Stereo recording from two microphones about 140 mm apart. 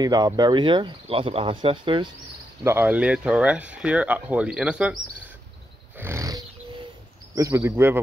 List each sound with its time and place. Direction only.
0.0 s speech: 30° right (ahead or behind)
2.6 s speech: 15° right (ahead or behind)
5.9 s wild animals: 20° right (ahead or behind)
7.3 s speech: 20° right (ahead or behind)